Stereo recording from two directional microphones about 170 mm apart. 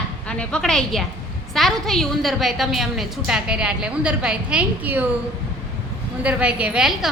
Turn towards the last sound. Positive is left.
turn(degrees=-5)  # may be behind; listen again after turning